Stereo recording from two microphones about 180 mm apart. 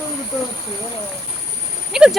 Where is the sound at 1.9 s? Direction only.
5° right (ahead or behind).